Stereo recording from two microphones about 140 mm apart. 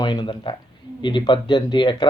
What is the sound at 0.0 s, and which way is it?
Speech, 30° left (ahead or behind).